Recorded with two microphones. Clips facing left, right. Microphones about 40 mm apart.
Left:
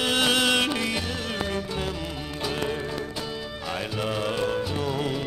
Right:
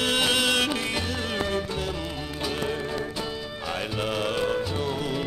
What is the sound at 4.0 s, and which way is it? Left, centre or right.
Music, centre.